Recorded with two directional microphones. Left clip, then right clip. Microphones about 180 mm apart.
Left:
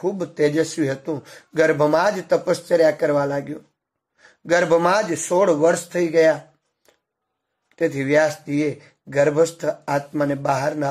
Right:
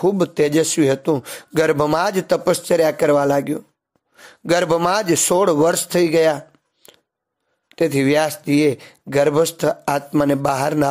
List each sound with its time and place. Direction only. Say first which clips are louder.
0.0 s a man's voice: right 4 dB; 35° right (ahead or behind)
7.7 s a man's voice: right 2 dB; 35° right (ahead or behind)